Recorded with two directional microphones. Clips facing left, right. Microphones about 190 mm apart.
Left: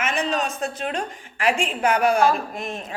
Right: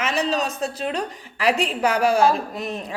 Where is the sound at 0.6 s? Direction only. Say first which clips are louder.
Right 1 dB; 30° right (ahead or behind).